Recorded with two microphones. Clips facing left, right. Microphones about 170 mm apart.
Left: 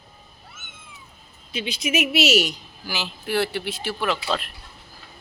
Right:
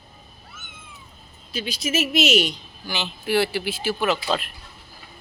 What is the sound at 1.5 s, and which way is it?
Speech, 20° left (ahead or behind).